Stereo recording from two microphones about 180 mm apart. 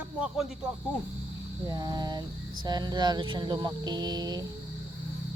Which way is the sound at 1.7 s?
25° right (ahead or behind).